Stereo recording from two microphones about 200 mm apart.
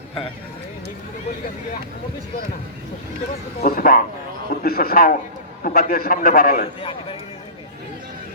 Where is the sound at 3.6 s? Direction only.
45° left (ahead or behind).